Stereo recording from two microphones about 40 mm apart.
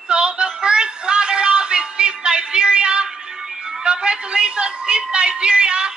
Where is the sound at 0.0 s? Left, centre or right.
Right.